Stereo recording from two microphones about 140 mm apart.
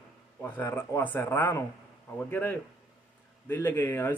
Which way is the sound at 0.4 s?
15° left (ahead or behind).